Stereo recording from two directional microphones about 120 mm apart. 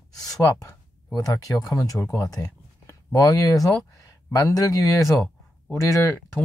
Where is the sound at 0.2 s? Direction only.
30° left (ahead or behind).